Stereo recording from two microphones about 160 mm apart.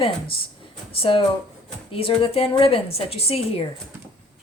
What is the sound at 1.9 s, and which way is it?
Speech, 35° left (ahead or behind).